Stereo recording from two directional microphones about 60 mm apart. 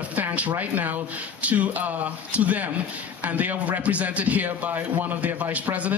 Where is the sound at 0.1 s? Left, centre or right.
Right.